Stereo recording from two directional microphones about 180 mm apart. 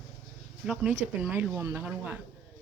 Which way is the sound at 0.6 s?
5° right (ahead or behind).